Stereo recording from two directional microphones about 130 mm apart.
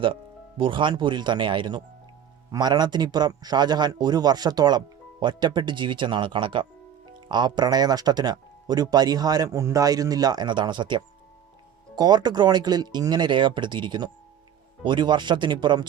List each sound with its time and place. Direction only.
0.0 s speech: 40° right (ahead or behind)